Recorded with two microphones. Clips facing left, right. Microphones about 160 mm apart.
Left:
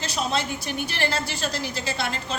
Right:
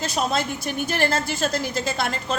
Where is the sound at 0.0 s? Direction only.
45° right (ahead or behind).